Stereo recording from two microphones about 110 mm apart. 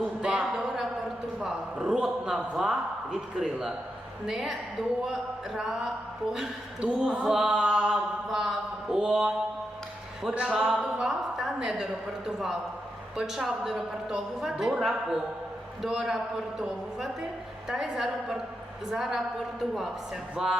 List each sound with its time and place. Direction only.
0.0 s a sound: 10° right (ahead or behind)
1.4 s a man's voice: 5° right (ahead or behind)
5.5 s a man's voice: 5° right (ahead or behind)
6.3 s a sound: 5° right (ahead or behind)
10.2 s a man's voice: 5° right (ahead or behind)
13.1 s a man's voice: 5° right (ahead or behind)
20.3 s a man's voice: 5° right (ahead or behind)